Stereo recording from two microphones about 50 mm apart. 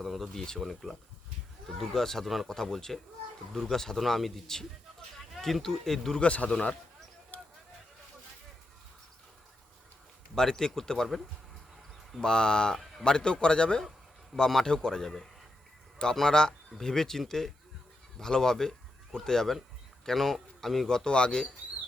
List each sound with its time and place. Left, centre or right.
0.0 s a sound: centre
0.6 s a man's voice: centre
6.1 s speech: left
7.3 s a sound: left
10.3 s a man's voice: centre
12.2 s a man's voice: centre